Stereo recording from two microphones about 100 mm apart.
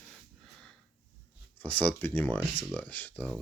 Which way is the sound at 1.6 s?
15° left (ahead or behind).